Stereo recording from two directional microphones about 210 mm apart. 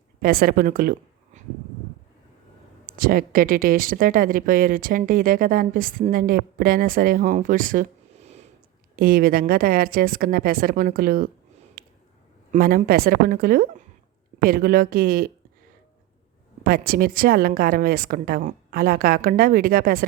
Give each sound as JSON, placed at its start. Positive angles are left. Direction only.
{"t": 0.2, "sound": "speech", "side_deg": -45}
{"t": 2.8, "sound": "speech", "side_deg": -40}
{"t": 9.0, "sound": "a woman's voice", "side_deg": -45}
{"t": 11.8, "sound": "squish", "side_deg": -45}
{"t": 12.5, "sound": "a woman's voice", "side_deg": -45}
{"t": 16.6, "sound": "a woman's voice", "side_deg": -45}